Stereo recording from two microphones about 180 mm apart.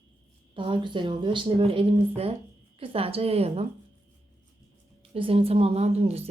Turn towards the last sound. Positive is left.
turn(degrees=-35)  # may be behind; listen again after turning